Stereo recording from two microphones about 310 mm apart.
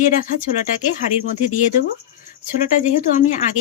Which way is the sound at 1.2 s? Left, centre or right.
Left.